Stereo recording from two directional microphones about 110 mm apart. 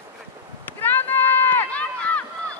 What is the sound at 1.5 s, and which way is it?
Run, 15° left (ahead or behind).